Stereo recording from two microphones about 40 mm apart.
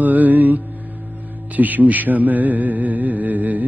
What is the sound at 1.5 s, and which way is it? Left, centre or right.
Music, right.